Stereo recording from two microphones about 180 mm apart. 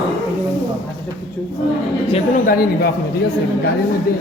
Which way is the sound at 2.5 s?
55° left (ahead or behind).